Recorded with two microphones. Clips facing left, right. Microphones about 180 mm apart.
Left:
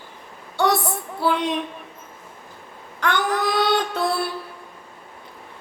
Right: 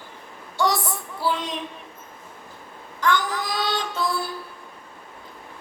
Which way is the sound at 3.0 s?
60° left (ahead or behind).